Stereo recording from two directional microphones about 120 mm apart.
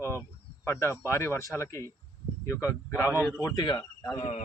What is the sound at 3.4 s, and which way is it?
Speech, 35° left (ahead or behind).